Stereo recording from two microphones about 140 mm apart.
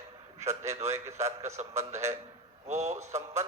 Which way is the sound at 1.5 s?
55° right (ahead or behind).